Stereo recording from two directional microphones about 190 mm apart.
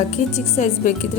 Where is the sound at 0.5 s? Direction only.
40° left (ahead or behind).